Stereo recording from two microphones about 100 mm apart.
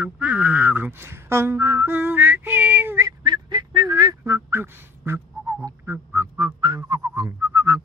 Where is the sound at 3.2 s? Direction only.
50° right (ahead or behind); by 5.5 s 25° right (ahead or behind).